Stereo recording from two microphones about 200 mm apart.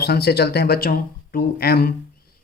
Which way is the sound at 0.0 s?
50° left (ahead or behind).